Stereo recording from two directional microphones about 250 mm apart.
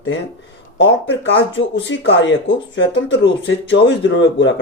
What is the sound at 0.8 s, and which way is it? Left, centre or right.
Speech, left.